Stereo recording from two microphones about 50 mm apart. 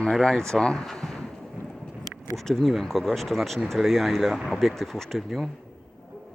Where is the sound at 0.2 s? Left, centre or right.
Centre.